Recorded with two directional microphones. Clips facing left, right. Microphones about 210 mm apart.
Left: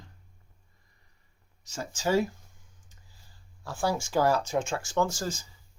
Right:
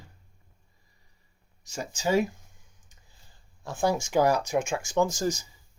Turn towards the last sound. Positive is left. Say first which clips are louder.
# right 3 dB
turn(degrees=-15)  # may be behind; listen again after turning